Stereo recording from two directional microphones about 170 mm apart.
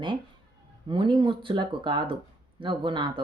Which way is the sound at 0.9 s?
30° right (ahead or behind).